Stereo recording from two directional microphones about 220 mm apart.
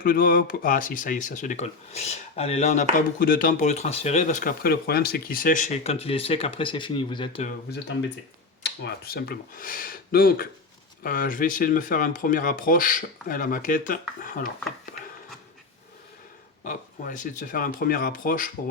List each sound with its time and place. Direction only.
0.0 s speech: 40° left (ahead or behind)
3.2 s speech: 40° left (ahead or behind); by 7.4 s 20° left (ahead or behind)
8.6 s speech: 50° left (ahead or behind)
16.6 s speech: 35° left (ahead or behind)